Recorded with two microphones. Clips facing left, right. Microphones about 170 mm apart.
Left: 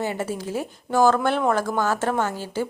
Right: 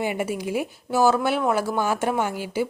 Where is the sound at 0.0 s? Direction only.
15° right (ahead or behind).